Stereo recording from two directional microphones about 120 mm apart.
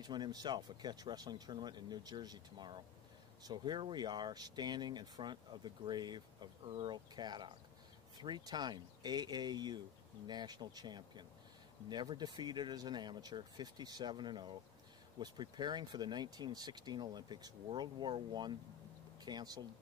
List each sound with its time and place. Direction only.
0.0 s speech: 35° right (ahead or behind)